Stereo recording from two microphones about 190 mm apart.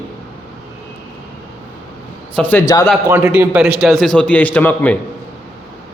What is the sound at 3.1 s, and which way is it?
A man's voice, 10° right (ahead or behind).